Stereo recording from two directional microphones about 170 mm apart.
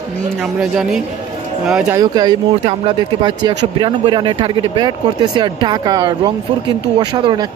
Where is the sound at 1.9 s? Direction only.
25° right (ahead or behind).